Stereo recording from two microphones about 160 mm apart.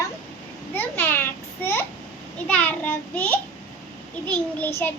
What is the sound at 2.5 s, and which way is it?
Child singing, 10° left (ahead or behind).